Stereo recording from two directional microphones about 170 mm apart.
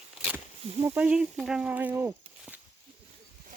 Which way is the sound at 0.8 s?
10° right (ahead or behind).